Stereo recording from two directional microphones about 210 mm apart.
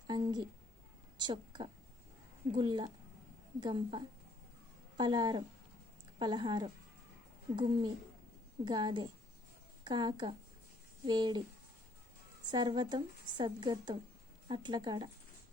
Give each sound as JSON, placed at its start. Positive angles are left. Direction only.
{"t": 0.1, "sound": "a woman's voice", "side_deg": -20}
{"t": 12.5, "sound": "a woman's voice", "side_deg": -20}